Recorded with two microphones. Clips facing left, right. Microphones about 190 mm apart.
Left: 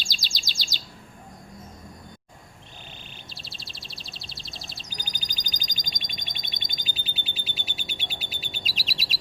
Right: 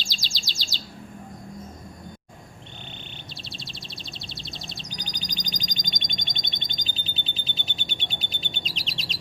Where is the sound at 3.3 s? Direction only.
Centre (ahead or behind).